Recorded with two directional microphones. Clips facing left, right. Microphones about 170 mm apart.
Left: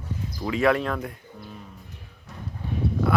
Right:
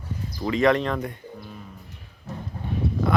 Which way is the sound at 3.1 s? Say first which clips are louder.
Even; 5° left (ahead or behind).